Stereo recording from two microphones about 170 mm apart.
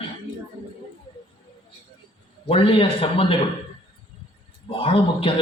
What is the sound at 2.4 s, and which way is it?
Speech, 35° left (ahead or behind).